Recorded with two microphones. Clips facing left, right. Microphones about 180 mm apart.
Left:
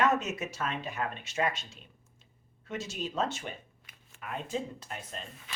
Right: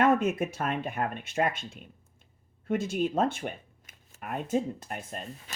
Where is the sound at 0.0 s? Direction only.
55° right (ahead or behind).